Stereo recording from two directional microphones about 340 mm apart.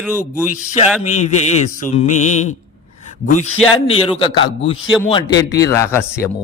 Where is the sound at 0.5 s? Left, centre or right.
Centre.